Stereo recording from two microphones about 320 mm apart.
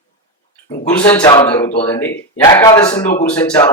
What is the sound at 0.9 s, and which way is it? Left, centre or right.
A man's voice, centre.